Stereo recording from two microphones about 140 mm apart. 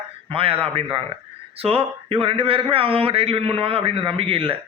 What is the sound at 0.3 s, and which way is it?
A man's voice, 40° right (ahead or behind).